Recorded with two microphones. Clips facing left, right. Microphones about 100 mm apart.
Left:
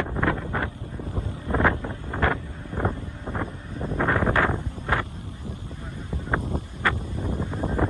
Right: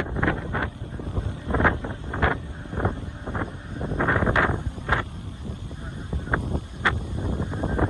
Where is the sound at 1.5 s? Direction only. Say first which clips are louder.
Even; 20° right (ahead or behind).